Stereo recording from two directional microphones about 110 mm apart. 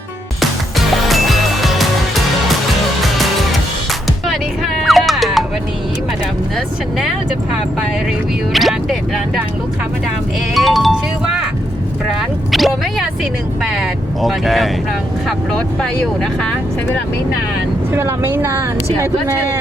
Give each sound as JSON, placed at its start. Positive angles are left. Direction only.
{"t": 1.0, "sound": "music", "side_deg": 0}
{"t": 4.3, "sound": "music", "side_deg": 0}
{"t": 8.5, "sound": "speech", "side_deg": 0}
{"t": 10.5, "sound": "music", "side_deg": 0}
{"t": 12.5, "sound": "speech", "side_deg": 0}
{"t": 14.2, "sound": "speech", "side_deg": 0}
{"t": 17.9, "sound": "speech", "side_deg": -20}